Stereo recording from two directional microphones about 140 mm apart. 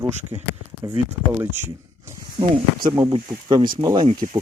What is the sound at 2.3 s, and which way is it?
Speech, 30° right (ahead or behind).